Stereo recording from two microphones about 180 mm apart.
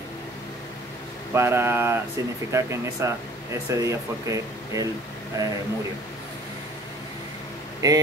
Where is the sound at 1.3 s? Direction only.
15° right (ahead or behind).